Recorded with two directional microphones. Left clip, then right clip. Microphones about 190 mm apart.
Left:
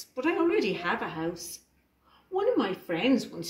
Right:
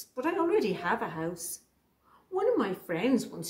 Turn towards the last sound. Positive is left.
turn(degrees=-20)  # may be behind; listen again after turning